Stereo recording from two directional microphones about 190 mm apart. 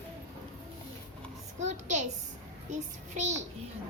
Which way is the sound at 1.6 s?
40° right (ahead or behind).